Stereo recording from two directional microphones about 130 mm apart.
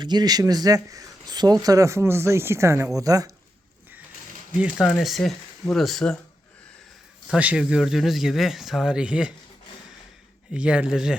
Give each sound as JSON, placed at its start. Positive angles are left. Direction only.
{"t": 0.0, "sound": "speech", "side_deg": -35}
{"t": 4.5, "sound": "speech", "side_deg": -5}
{"t": 7.3, "sound": "speech", "side_deg": -10}
{"t": 10.5, "sound": "speech", "side_deg": -10}